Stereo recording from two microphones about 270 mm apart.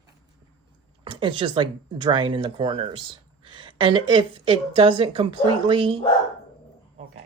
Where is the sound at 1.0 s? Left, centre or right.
Centre.